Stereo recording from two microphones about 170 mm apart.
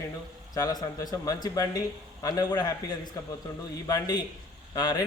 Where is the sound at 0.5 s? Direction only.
20° left (ahead or behind).